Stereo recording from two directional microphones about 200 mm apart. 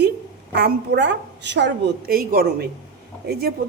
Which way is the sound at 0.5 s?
60° right (ahead or behind).